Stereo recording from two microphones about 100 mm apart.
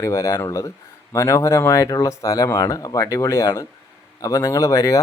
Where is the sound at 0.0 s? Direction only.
30° left (ahead or behind).